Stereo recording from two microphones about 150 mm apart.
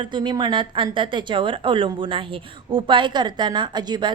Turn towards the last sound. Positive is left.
turn(degrees=-30)  # may be behind; listen again after turning